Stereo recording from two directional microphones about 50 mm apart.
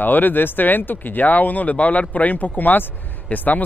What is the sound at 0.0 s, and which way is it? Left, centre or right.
Speech, left.